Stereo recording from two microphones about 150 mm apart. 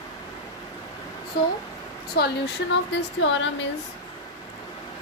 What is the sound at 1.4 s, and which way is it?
Speech, 90° left.